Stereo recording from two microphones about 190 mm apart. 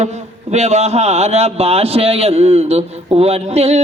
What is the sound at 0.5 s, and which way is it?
A man's voice, 35° right (ahead or behind).